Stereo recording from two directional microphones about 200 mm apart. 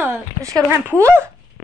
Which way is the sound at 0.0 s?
15° right (ahead or behind).